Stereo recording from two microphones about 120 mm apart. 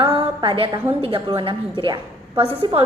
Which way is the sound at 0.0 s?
50° right (ahead or behind).